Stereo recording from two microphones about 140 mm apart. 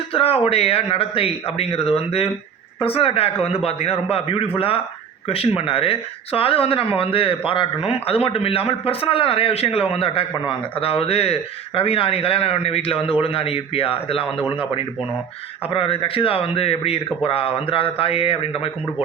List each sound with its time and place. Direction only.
0.1 s speech: 45° left (ahead or behind)
14.3 s a man's voice: 10° right (ahead or behind)
15.7 s speech: 40° left (ahead or behind)